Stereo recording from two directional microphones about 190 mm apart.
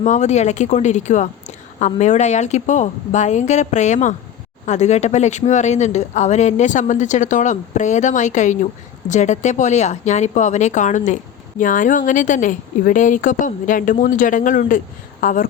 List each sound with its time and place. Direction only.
0.0 s a woman's voice: 40° left (ahead or behind)